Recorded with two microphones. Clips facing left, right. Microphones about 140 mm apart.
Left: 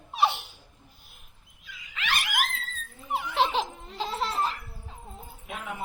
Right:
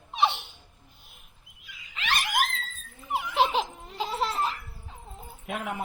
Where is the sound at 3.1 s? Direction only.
Centre (ahead or behind).